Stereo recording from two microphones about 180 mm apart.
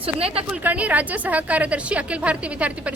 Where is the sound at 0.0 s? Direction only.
30° right (ahead or behind).